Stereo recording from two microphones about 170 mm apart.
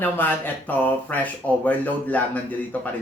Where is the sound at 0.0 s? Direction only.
10° left (ahead or behind).